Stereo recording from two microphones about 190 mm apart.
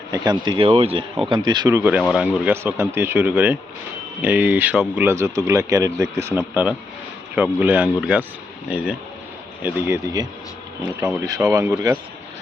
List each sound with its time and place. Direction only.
0.1 s speech: 25° right (ahead or behind)
2.0 s speech: centre (ahead or behind)
9.6 s speech: 10° right (ahead or behind)
11.0 s speech: 5° right (ahead or behind)
11.5 s speech: 20° right (ahead or behind)